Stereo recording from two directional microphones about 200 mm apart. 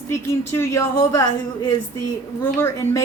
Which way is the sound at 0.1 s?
15° left (ahead or behind).